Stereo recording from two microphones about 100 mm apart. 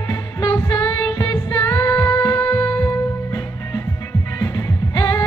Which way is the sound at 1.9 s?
10° left (ahead or behind).